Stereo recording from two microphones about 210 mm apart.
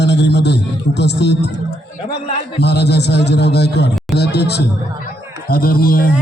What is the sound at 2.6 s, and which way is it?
A man's voice, 50° left (ahead or behind).